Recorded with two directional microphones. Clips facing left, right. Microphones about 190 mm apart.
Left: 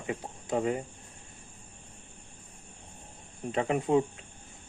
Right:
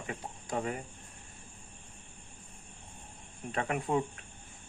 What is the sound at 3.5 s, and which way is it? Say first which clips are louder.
Speech: left 5 dB; 25° left (ahead or behind).